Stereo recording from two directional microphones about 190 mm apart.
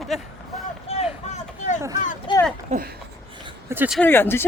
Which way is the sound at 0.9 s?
35° left (ahead or behind).